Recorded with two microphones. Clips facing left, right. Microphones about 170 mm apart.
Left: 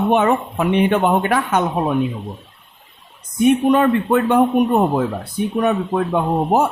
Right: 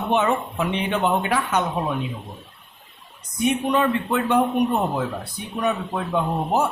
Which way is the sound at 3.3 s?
50° left (ahead or behind).